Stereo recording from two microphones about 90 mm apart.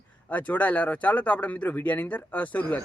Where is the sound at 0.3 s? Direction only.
15° left (ahead or behind).